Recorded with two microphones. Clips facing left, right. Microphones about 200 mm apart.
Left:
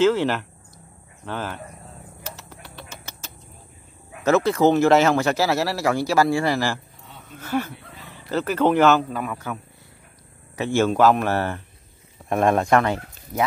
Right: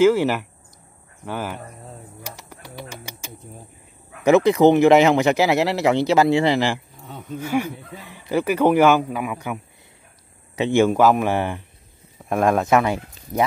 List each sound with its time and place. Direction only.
0.0 s speech: 10° right (ahead or behind)
2.3 s bird: 10° right (ahead or behind)
2.6 s a sound: 10° right (ahead or behind)
4.2 s speech: 15° right (ahead or behind)
12.3 s speech: centre (ahead or behind)